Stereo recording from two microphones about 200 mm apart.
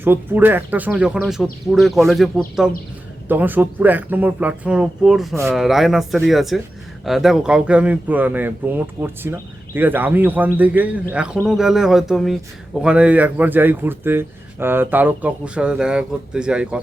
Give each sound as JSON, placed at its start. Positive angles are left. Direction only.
{"t": 0.0, "sound": "speech", "side_deg": -10}
{"t": 5.3, "sound": "speech", "side_deg": -15}
{"t": 5.5, "sound": "speech", "side_deg": 0}